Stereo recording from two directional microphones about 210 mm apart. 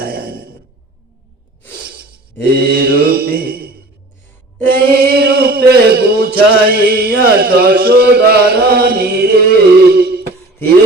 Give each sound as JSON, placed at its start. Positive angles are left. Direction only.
{"t": 0.0, "sound": "sigh", "side_deg": -45}
{"t": 2.5, "sound": "mantra", "side_deg": -45}
{"t": 4.9, "sound": "music", "side_deg": -45}